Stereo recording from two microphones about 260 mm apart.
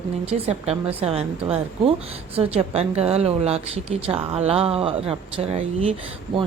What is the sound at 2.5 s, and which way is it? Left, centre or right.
A woman's voice, right.